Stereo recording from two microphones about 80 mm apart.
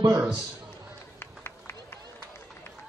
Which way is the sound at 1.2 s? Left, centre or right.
Left.